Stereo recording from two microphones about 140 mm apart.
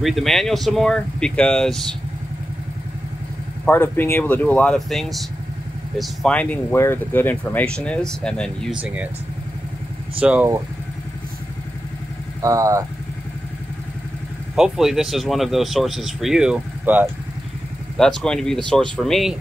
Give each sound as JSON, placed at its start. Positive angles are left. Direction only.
{"t": 0.0, "sound": "speech", "side_deg": 0}
{"t": 3.6, "sound": "speech", "side_deg": 15}
{"t": 10.2, "sound": "speech", "side_deg": -10}
{"t": 12.4, "sound": "speech", "side_deg": -25}
{"t": 14.5, "sound": "speech", "side_deg": -5}
{"t": 17.9, "sound": "speech", "side_deg": 5}